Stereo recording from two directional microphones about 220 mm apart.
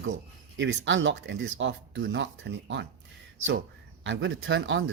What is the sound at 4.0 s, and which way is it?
Speech, 55° right (ahead or behind).